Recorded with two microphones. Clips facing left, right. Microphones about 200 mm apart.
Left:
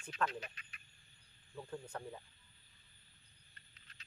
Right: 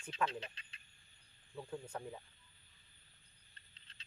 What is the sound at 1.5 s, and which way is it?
Speech, 10° right (ahead or behind).